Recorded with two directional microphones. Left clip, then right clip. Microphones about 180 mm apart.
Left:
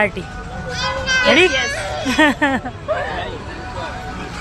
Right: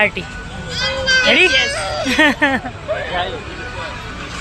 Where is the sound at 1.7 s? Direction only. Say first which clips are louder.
Right 2 dB; 65° right (ahead or behind).